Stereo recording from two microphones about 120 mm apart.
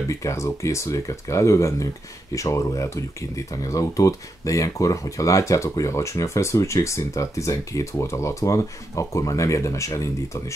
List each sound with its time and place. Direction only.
0.1 s speech: 25° left (ahead or behind)